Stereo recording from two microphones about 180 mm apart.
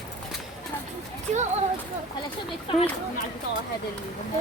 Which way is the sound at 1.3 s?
40° right (ahead or behind).